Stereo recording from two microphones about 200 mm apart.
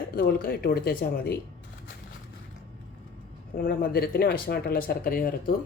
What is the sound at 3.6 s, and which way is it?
A woman's voice, 45° left (ahead or behind).